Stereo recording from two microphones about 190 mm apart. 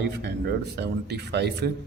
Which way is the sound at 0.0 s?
65° right (ahead or behind).